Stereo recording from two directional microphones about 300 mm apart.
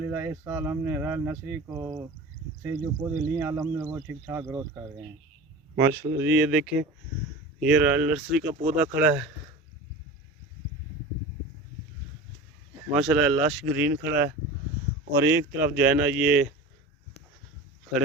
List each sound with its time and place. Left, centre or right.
0.1 s speech: centre
13.0 s speech: centre
15.1 s speech: centre